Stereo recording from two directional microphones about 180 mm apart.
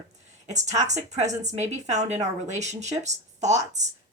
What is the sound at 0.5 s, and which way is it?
Speech, 40° right (ahead or behind).